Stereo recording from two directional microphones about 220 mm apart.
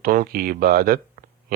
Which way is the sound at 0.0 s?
40° right (ahead or behind).